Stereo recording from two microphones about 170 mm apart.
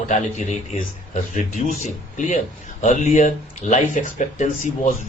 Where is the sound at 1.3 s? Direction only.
45° left (ahead or behind).